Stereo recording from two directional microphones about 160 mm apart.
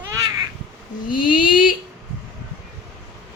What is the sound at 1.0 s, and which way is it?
Speech, 60° left (ahead or behind).